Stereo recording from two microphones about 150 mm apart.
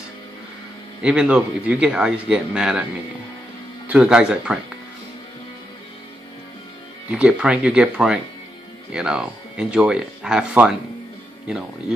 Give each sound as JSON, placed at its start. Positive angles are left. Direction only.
{"t": 1.0, "sound": "speech", "side_deg": -5}
{"t": 3.8, "sound": "speech", "side_deg": -10}
{"t": 7.1, "sound": "speech", "side_deg": -5}